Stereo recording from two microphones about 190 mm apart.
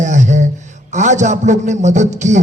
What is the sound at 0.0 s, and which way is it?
A man's voice, 40° right (ahead or behind).